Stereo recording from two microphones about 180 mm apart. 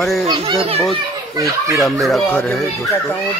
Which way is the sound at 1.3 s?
20° right (ahead or behind).